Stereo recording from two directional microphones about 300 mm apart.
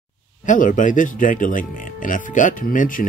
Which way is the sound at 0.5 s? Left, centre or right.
Left.